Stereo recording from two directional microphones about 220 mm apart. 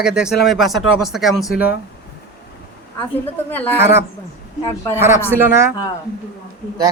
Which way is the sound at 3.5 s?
10° left (ahead or behind).